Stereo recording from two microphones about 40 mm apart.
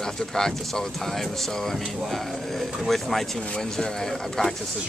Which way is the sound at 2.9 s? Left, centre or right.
Centre.